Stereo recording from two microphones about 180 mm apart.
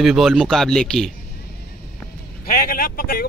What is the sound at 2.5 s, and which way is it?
Speech, 50° left (ahead or behind).